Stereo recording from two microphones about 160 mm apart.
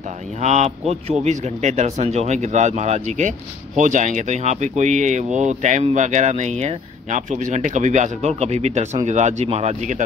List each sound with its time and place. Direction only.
0.4 s speech: 45° right (ahead or behind)